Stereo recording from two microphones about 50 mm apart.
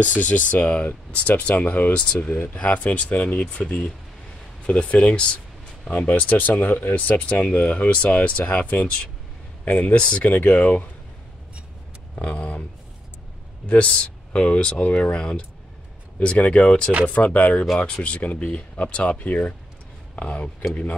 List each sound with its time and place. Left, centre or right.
0.0 s speech: left
2.5 s speech: left
4.6 s speech: left
12.2 s speech: left
13.7 s speech: left
17.1 s speech: left